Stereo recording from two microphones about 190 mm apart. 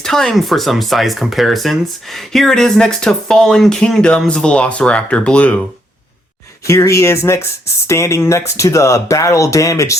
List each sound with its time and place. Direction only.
0.0 s speech: centre (ahead or behind)
6.7 s speech: 15° left (ahead or behind)